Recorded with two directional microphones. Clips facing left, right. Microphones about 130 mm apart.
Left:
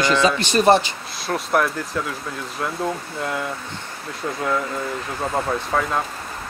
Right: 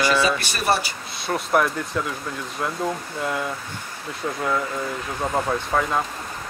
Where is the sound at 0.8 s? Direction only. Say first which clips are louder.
Left 4 dB; centre (ahead or behind).